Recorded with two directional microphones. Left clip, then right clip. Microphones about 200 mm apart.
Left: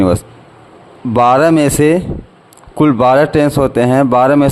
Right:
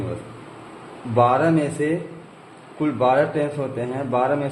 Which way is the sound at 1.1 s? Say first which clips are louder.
Left 9 dB; 55° left (ahead or behind).